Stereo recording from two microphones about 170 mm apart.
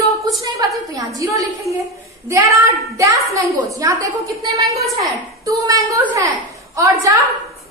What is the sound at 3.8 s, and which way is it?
A woman's voice, 20° right (ahead or behind).